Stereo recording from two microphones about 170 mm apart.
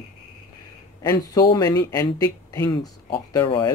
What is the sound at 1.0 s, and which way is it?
A man's voice, 20° left (ahead or behind).